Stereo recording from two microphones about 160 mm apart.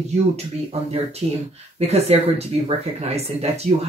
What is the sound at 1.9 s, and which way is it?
Speech, 40° right (ahead or behind).